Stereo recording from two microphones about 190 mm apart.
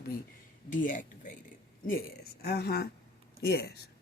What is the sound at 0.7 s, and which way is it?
Speech, 45° left (ahead or behind).